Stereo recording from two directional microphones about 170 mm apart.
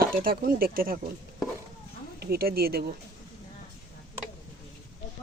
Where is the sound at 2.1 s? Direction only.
65° right (ahead or behind).